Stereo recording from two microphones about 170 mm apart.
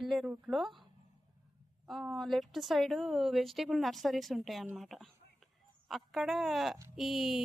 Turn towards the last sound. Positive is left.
turn(degrees=0)  # may be behind; listen again after turning